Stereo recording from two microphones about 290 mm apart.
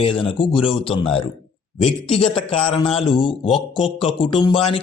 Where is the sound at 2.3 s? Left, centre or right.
Centre.